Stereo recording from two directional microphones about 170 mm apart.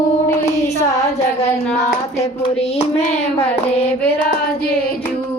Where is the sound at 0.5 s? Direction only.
40° left (ahead or behind).